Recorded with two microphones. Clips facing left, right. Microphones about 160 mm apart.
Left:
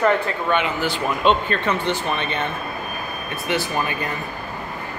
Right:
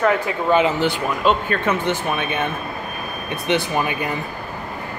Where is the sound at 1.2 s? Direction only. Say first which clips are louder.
Even; 10° right (ahead or behind).